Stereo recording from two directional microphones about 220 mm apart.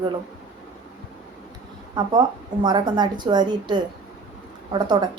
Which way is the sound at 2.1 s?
20° right (ahead or behind).